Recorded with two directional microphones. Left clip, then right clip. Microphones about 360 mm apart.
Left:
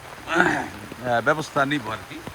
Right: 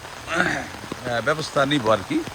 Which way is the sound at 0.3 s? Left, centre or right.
Centre.